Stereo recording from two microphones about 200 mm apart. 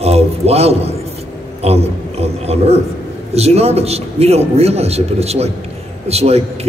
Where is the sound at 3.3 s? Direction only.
30° right (ahead or behind).